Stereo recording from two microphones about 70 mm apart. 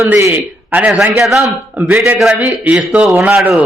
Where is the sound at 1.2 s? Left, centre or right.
Centre.